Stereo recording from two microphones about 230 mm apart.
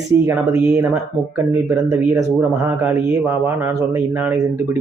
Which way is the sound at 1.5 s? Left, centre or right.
Centre.